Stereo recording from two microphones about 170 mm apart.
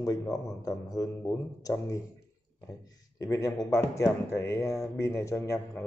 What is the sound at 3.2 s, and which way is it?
A man's voice, 20° left (ahead or behind).